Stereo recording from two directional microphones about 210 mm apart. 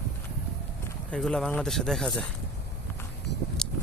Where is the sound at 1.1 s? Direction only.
Centre (ahead or behind).